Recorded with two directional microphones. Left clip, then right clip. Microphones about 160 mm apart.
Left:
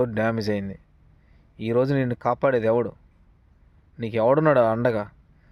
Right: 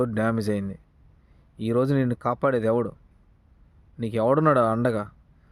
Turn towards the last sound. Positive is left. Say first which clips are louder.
# left 2 dB
turn(degrees=-20)  # may be behind; listen again after turning